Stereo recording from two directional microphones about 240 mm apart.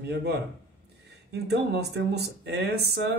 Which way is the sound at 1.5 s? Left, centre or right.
Right.